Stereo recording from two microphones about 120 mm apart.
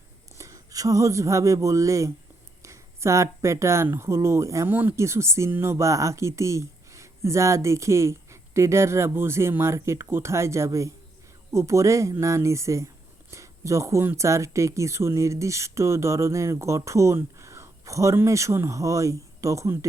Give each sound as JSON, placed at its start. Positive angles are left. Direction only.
{"t": 0.3, "sound": "speech", "side_deg": -25}